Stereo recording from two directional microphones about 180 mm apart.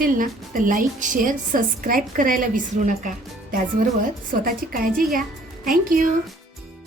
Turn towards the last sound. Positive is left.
turn(degrees=-50)  # may be behind; listen again after turning